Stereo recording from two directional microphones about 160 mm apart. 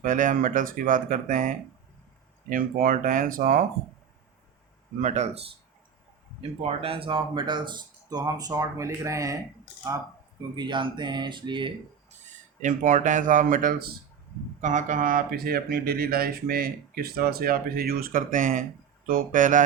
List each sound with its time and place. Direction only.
0.0 s speech: 55° right (ahead or behind)
4.9 s speech: 45° right (ahead or behind)
6.6 s speech: 35° right (ahead or behind); by 9.4 s 20° right (ahead or behind)
10.5 s speech: 30° right (ahead or behind)
12.6 s speech: 50° right (ahead or behind)
14.6 s speech: 50° right (ahead or behind)